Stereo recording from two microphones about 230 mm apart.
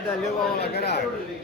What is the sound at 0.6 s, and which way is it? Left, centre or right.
Speech, left.